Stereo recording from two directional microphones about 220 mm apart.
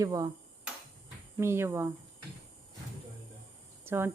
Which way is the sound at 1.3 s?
10° right (ahead or behind).